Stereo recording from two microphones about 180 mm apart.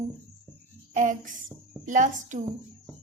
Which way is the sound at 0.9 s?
45° right (ahead or behind).